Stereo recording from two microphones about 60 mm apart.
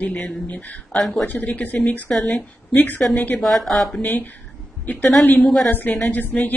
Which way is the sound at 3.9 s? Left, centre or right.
Left.